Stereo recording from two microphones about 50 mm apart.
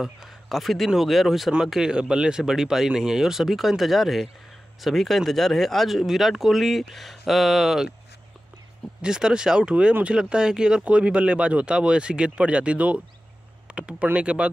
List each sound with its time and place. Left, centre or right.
0.0 s speech: centre
1.5 s speech: centre
9.0 s speech: centre